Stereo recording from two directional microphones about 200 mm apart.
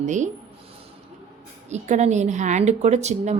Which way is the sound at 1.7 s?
35° right (ahead or behind).